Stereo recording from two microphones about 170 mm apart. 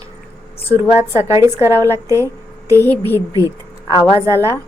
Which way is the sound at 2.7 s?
10° left (ahead or behind).